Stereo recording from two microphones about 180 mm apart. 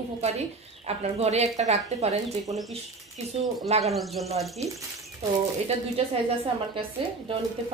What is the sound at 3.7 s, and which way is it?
Speech, 35° right (ahead or behind).